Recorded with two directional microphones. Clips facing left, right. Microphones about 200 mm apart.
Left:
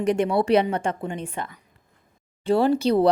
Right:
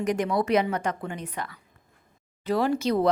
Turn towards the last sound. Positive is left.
turn(degrees=30)  # may be behind; listen again after turning